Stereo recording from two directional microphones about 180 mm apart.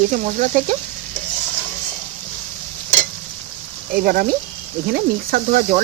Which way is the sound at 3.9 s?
55° right (ahead or behind).